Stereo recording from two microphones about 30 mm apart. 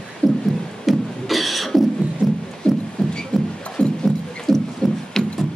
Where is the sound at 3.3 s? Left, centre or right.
Left.